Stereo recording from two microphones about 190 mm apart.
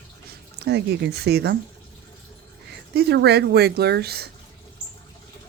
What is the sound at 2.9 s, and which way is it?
Speech, 60° right (ahead or behind).